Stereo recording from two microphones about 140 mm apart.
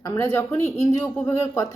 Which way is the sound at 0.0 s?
20° left (ahead or behind).